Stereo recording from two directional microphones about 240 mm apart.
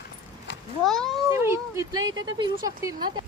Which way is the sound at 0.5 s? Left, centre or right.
Left.